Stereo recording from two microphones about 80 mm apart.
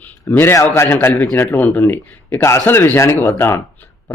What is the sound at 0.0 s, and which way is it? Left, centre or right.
A man's voice, left.